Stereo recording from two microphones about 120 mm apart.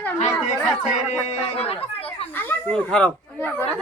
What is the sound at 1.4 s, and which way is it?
Chatter, 55° left (ahead or behind).